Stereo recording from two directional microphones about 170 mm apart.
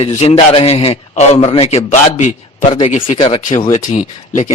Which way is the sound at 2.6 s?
30° left (ahead or behind).